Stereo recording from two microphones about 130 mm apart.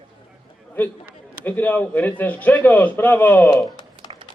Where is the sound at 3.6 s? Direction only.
35° left (ahead or behind).